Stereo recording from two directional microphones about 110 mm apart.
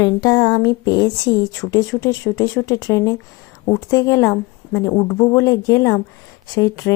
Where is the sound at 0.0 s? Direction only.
35° left (ahead or behind).